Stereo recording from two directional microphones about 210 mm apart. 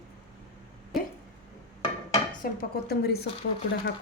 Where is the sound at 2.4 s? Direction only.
45° left (ahead or behind).